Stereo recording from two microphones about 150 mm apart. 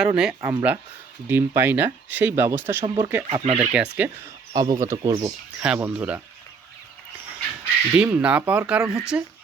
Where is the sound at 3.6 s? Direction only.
10° right (ahead or behind).